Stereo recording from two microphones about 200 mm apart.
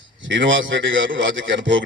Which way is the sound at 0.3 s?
70° right (ahead or behind).